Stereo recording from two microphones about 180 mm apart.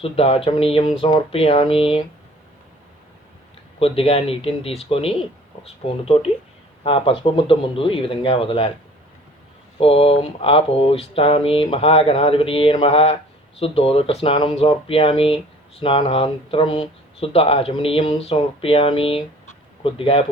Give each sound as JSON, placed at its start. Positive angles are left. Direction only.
{"t": 0.0, "sound": "speech", "side_deg": 30}
{"t": 3.8, "sound": "speech", "side_deg": 30}
{"t": 9.7, "sound": "speech", "side_deg": 30}